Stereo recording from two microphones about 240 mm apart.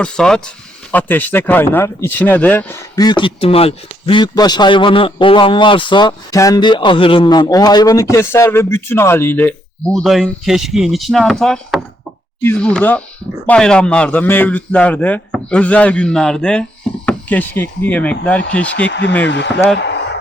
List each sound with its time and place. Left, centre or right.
0.0 s a man's voice: centre
18.9 s speech: left